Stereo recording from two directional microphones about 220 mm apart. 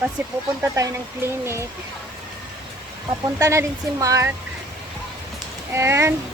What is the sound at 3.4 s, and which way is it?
Speech, 15° right (ahead or behind).